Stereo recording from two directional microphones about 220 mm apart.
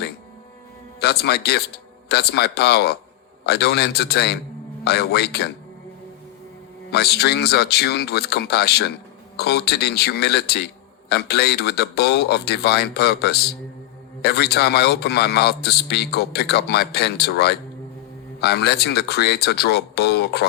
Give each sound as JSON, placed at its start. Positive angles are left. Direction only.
{"t": 0.9, "sound": "a man's voice", "side_deg": 45}
{"t": 6.9, "sound": "a man's voice", "side_deg": 45}